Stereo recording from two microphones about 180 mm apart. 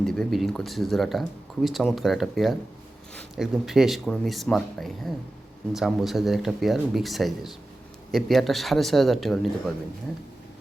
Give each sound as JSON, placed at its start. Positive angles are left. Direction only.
{"t": 0.0, "sound": "speech", "side_deg": 0}